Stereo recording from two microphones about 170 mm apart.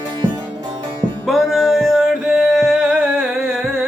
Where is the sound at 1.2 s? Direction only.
Centre (ahead or behind).